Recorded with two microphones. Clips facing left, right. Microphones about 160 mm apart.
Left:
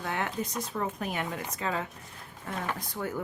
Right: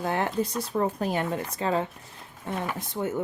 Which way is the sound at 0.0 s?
35° right (ahead or behind).